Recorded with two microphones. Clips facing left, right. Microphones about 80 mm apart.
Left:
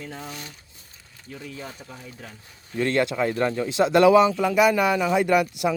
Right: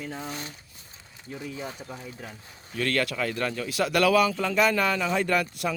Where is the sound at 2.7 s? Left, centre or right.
Left.